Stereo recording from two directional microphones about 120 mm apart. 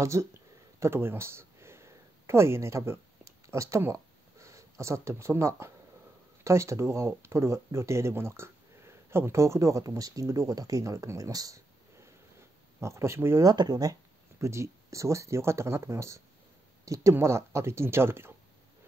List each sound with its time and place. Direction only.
0.0 s speech: 25° right (ahead or behind)
0.7 s a sound: 20° right (ahead or behind)
6.4 s speech: 25° right (ahead or behind)
13.5 s speech: 35° right (ahead or behind)